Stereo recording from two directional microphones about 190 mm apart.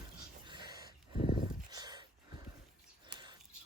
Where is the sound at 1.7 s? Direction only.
20° right (ahead or behind).